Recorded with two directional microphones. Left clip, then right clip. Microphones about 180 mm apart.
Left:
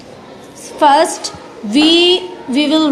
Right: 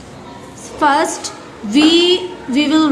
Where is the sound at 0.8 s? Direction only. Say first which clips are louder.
Left 4 dB; 25° left (ahead or behind).